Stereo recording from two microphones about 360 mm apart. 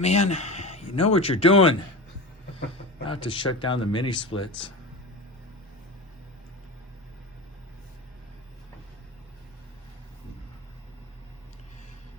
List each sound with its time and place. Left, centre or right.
0.0 s speech: centre
3.1 s speech: centre